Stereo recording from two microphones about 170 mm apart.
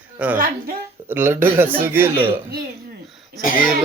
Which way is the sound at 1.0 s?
10° right (ahead or behind).